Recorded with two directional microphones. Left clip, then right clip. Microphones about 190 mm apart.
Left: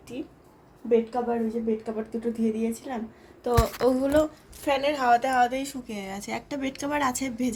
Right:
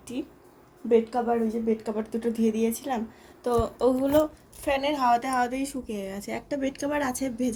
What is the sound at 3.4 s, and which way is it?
Speech, 15° right (ahead or behind).